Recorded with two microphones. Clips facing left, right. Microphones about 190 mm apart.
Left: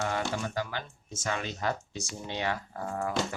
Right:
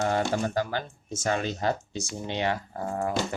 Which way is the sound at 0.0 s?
40° right (ahead or behind).